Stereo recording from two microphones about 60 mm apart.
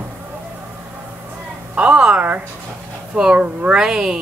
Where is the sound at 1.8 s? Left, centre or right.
Centre.